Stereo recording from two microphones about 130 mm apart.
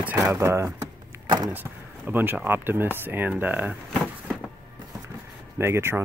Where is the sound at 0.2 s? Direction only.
25° right (ahead or behind).